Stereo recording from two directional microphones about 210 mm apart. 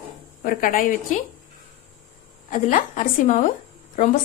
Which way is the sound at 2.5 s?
35° left (ahead or behind).